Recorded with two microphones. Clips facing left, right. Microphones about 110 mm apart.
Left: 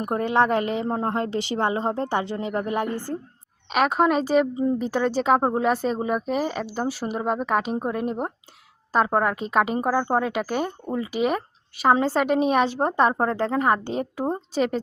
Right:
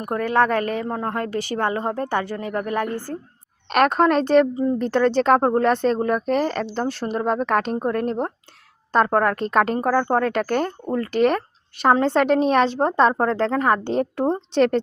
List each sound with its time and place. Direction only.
0.0 s a woman's voice: 25° left (ahead or behind)
3.7 s speech: 5° left (ahead or behind)